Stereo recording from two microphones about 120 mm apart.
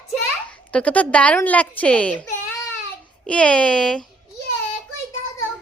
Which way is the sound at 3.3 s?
10° left (ahead or behind).